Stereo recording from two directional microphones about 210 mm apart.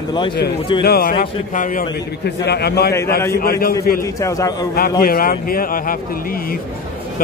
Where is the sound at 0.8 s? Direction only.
45° left (ahead or behind).